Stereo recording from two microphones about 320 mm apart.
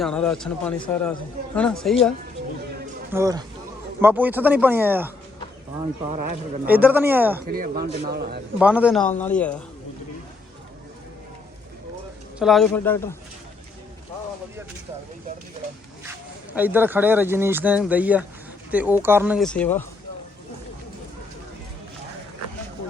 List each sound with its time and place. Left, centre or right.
0.0 s speech: centre
3.1 s speech: centre
6.1 s a man's voice: right
6.7 s speech: centre
7.4 s a man's voice: right
8.5 s speech: centre
12.4 s speech: centre
16.5 s speech: centre